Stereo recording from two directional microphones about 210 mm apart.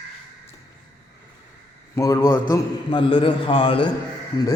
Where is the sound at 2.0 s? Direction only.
15° left (ahead or behind).